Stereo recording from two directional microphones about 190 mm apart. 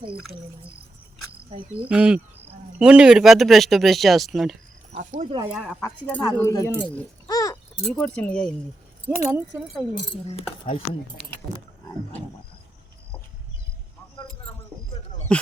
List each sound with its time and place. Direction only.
1.9 s speech: 5° right (ahead or behind)
4.9 s speech: 35° right (ahead or behind)
5.4 s speech: 5° right (ahead or behind)
5.8 s speech: 10° left (ahead or behind)
7.3 s keys jangling: 20° left (ahead or behind)
7.9 s speech: 5° left (ahead or behind)
9.1 s speech: 10° right (ahead or behind)
10.7 s speech: 30° left (ahead or behind)
15.3 s speech: 5° left (ahead or behind)